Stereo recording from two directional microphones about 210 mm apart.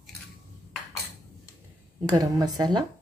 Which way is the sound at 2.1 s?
15° right (ahead or behind).